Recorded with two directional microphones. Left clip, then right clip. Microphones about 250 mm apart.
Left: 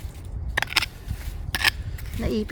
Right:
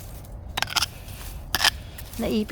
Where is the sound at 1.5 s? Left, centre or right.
Centre.